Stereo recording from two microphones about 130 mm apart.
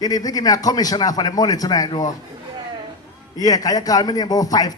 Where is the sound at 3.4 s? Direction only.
30° left (ahead or behind).